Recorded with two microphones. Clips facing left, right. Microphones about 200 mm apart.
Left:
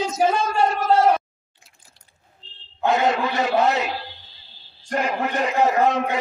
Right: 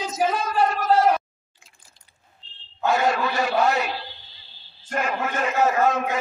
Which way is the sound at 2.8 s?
20° left (ahead or behind).